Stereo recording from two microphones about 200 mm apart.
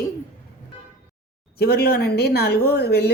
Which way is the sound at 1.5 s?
55° left (ahead or behind).